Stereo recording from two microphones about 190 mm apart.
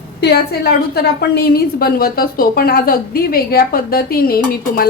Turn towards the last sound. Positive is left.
turn(degrees=50)  # may be behind; listen again after turning